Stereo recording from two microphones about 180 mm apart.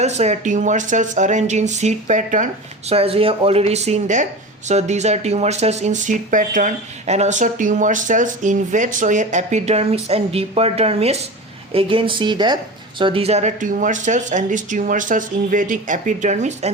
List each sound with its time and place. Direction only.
0.0 s speech: 40° right (ahead or behind)
2.9 s speech: 30° right (ahead or behind)